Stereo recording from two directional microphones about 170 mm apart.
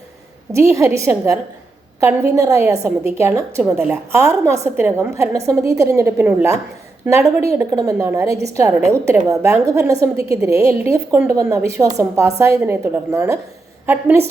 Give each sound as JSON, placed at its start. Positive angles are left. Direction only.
{"t": 0.5, "sound": "a woman's voice", "side_deg": -15}